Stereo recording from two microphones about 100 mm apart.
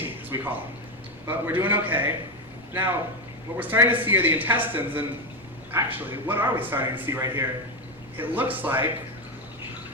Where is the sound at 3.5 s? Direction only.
20° right (ahead or behind).